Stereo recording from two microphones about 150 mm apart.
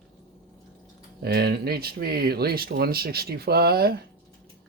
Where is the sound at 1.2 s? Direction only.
90° right.